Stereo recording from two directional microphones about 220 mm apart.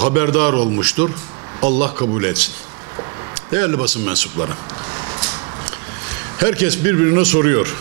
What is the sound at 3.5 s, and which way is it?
Speech, 10° right (ahead or behind).